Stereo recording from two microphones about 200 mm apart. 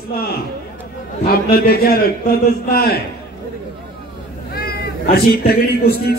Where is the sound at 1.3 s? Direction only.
50° left (ahead or behind).